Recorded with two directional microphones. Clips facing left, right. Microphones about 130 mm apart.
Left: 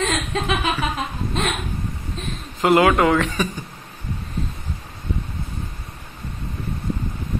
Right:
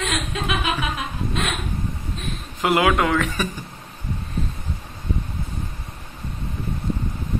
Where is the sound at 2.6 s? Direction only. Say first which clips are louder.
Left 3 dB; centre (ahead or behind).